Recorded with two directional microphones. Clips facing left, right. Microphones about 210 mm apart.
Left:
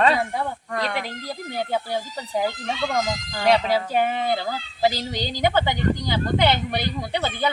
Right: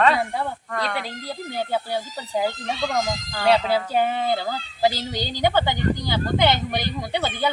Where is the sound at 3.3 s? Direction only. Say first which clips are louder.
Even; 15° left (ahead or behind).